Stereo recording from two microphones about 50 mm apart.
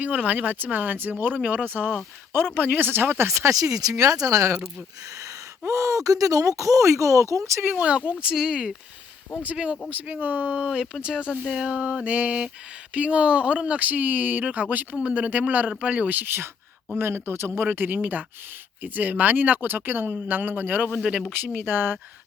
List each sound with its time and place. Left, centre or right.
0.0 s speech: right
3.2 s speech: right
5.2 s gasp: right
6.6 s speech: right
7.7 s a sound: right
8.2 s speech: centre
9.9 s speech: right
10.5 s a sound: right
13.7 s speech: right
14.9 s speech: right
21.0 s speech: centre
21.4 s speech: right